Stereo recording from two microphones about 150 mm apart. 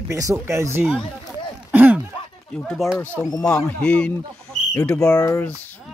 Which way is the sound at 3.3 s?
20° left (ahead or behind).